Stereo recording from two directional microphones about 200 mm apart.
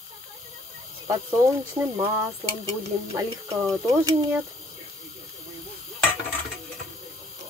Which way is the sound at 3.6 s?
15° right (ahead or behind).